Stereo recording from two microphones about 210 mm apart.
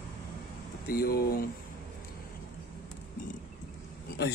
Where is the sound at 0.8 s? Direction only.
45° left (ahead or behind).